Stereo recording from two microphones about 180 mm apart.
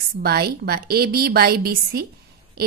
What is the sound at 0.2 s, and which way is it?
A woman's voice, 60° right (ahead or behind).